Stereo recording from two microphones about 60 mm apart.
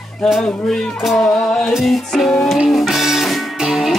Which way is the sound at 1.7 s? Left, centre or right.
Centre.